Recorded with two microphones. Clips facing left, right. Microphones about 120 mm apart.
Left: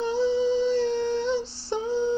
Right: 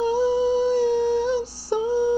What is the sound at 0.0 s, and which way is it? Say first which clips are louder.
Music: right 3 dB; 10° right (ahead or behind).